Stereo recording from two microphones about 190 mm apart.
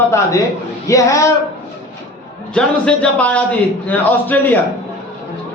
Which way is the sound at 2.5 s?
5° left (ahead or behind).